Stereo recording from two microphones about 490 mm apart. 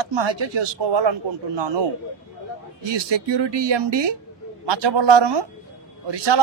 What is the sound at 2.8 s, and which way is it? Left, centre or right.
Speech, right.